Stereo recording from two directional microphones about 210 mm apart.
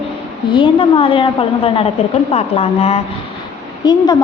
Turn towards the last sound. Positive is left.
turn(degrees=20)  # may be behind; listen again after turning